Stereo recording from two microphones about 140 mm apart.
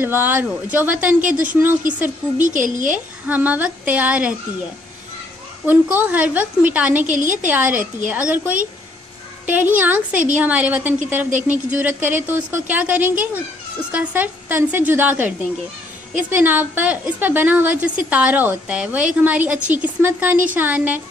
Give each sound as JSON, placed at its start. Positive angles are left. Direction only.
{"t": 0.0, "sound": "a woman's voice", "side_deg": -15}
{"t": 2.4, "sound": "a woman's voice", "side_deg": -70}
{"t": 2.9, "sound": "a woman's voice", "side_deg": -10}
{"t": 5.7, "sound": "a woman's voice", "side_deg": -10}